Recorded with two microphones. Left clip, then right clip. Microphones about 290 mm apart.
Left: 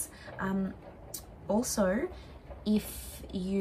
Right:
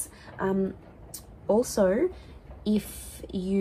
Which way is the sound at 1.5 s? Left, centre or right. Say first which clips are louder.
Right 6 dB; right.